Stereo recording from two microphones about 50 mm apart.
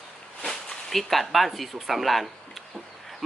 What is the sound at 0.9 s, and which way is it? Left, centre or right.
Speech, centre.